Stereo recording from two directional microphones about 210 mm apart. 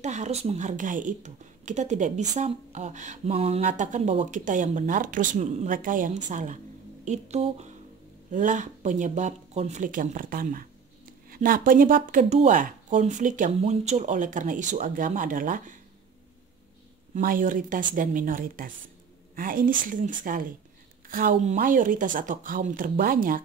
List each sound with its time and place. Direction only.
0.0 s speech: 35° right (ahead or behind)
17.1 s speech: 40° right (ahead or behind)